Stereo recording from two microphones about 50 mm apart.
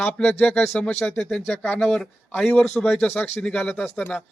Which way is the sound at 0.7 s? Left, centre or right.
Left.